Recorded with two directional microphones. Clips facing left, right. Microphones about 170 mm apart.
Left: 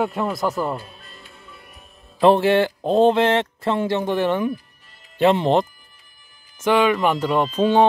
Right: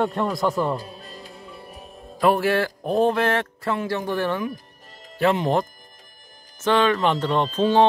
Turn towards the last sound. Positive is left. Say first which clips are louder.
# left 1 dB
turn(degrees=15)  # may be behind; listen again after turning